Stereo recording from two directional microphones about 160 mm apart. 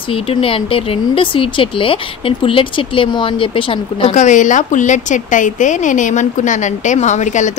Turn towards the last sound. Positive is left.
turn(degrees=50)  # may be behind; listen again after turning